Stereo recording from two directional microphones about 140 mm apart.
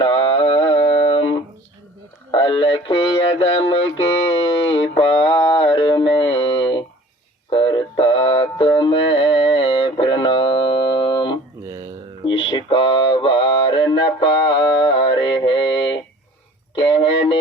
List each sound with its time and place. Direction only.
0.0 s mantra: 40° left (ahead or behind)
2.3 s speech: 35° left (ahead or behind)
4.3 s music: 35° left (ahead or behind)
7.5 s synthetic singing: 35° left (ahead or behind)
12.2 s mantra: 35° left (ahead or behind)
16.7 s music: 35° left (ahead or behind)